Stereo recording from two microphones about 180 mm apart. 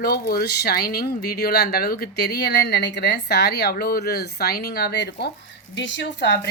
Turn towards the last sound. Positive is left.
turn(degrees=75)  # may be behind; listen again after turning